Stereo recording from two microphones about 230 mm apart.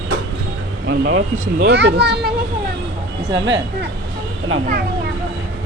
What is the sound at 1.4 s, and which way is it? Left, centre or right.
Speech, right.